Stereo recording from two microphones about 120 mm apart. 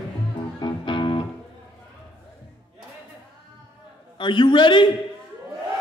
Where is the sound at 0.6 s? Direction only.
40° left (ahead or behind).